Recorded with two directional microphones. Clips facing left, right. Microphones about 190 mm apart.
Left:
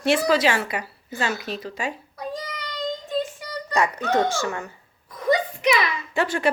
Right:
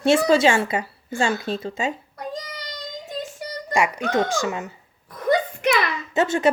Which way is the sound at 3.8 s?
10° right (ahead or behind).